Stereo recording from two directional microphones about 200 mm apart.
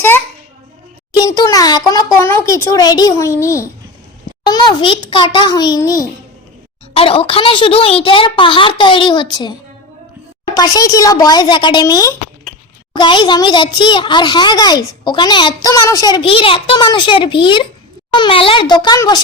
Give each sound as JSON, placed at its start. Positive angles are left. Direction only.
{"t": 1.2, "sound": "a sound", "side_deg": 20}
{"t": 2.1, "sound": "a child's voice", "side_deg": 15}
{"t": 6.9, "sound": "a child's voice", "side_deg": 30}